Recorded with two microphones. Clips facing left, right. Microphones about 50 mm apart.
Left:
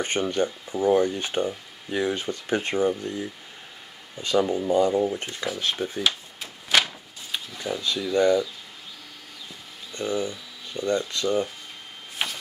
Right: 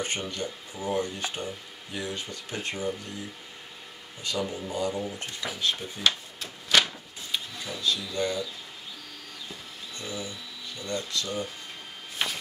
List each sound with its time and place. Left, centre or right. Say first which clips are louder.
0.0 s speech: left 7 dB; left
4.2 s speech: left 9 dB; left
6.0 s a sound: even; centre
7.5 s speech: left 4 dB; left
9.9 s speech: left 10 dB; left
12.2 s ratchet: left 1 dB; centre